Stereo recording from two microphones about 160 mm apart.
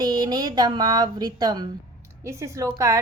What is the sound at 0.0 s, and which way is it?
A woman's voice, 25° right (ahead or behind).